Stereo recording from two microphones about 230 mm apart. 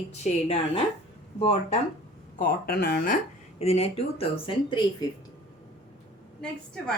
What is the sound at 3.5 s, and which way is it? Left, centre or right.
Speech, left.